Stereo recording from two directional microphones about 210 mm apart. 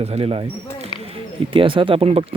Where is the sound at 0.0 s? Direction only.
30° right (ahead or behind).